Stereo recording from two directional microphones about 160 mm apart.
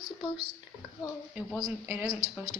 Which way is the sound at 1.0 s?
25° left (ahead or behind).